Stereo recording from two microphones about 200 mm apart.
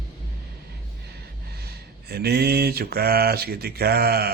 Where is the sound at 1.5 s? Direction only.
55° right (ahead or behind).